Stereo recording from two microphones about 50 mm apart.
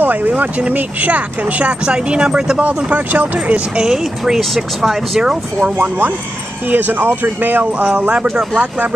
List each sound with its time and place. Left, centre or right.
0.0 s vehicle: right
0.3 s speech: right
2.6 s speech: right
3.8 s speech: centre
5.2 s speech: centre
6.7 s speech: right
8.1 s speech: centre
8.5 s speech: right